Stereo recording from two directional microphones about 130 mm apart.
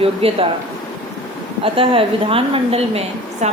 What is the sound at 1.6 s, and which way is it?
A woman's voice, 45° right (ahead or behind).